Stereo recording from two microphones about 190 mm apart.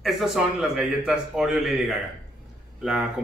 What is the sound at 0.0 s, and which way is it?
Speech, 5° right (ahead or behind).